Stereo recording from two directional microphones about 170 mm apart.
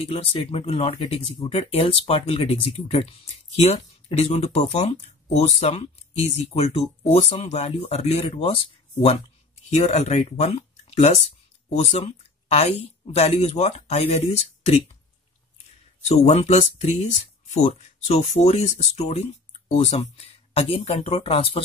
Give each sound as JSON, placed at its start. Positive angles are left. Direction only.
{"t": 0.0, "sound": "speech", "side_deg": 35}
{"t": 9.7, "sound": "speech", "side_deg": 40}
{"t": 16.1, "sound": "speech", "side_deg": 35}